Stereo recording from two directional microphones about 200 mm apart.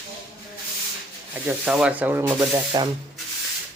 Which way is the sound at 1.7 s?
5° right (ahead or behind).